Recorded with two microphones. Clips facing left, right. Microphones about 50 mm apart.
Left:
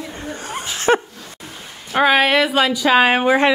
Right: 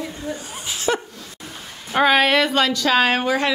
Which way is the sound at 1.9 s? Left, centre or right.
Centre.